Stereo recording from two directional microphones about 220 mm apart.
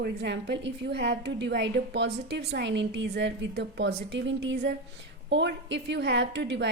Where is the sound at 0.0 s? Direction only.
50° right (ahead or behind).